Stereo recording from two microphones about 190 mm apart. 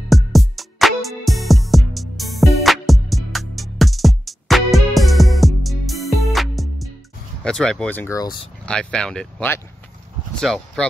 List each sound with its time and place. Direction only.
0.1 s music: centre (ahead or behind)
7.4 s speech: 5° left (ahead or behind)
8.6 s speech: 5° left (ahead or behind)